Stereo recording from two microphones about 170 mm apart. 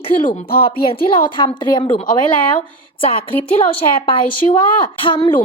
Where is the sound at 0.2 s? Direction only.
55° left (ahead or behind).